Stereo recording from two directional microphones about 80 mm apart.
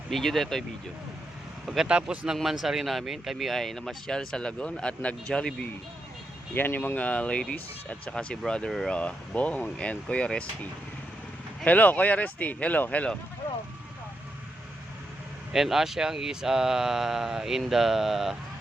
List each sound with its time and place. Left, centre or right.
0.1 s a man's voice: centre
1.6 s a man's voice: centre
6.5 s speech: left
15.5 s a man's voice: centre